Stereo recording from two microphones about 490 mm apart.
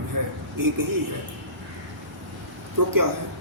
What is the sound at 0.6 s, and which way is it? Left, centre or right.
Speech, right.